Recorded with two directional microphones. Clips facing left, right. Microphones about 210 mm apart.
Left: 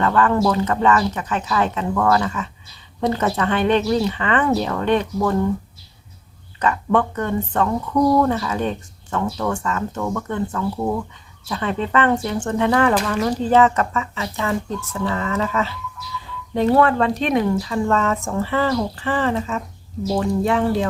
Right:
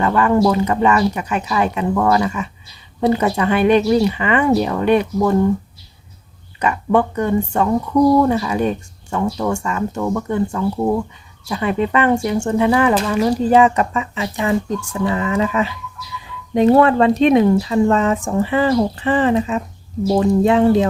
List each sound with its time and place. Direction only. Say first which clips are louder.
0.0 s speech: right 3 dB; 10° right (ahead or behind)
6.6 s speech: right 3 dB; 10° right (ahead or behind)